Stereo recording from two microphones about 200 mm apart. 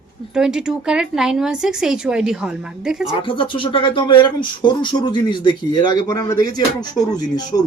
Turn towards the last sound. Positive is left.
turn(degrees=20)  # may be behind; listen again after turning